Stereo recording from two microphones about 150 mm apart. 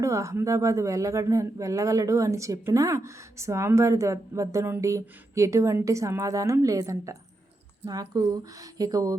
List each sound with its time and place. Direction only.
0.0 s speech: 20° right (ahead or behind)